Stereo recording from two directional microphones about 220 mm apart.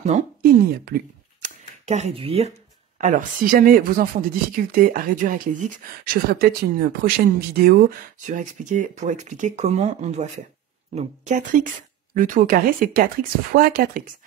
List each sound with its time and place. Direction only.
0.0 s speech: 30° right (ahead or behind)
0.8 s a sound: 45° right (ahead or behind)
1.9 s speech: 30° right (ahead or behind)
3.0 s speech: 35° right (ahead or behind)